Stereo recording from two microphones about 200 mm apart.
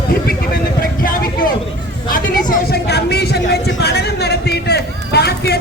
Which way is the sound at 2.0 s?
45° left (ahead or behind).